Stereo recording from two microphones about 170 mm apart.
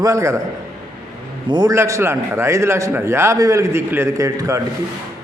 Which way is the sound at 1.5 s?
25° right (ahead or behind).